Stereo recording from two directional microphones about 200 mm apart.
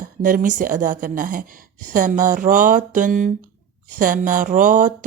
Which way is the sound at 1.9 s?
40° right (ahead or behind).